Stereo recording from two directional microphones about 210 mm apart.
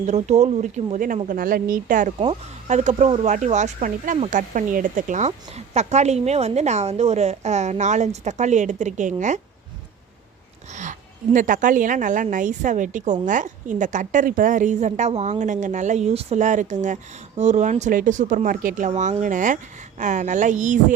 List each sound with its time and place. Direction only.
0.0 s speech: 35° right (ahead or behind)
10.7 s speech: 35° right (ahead or behind)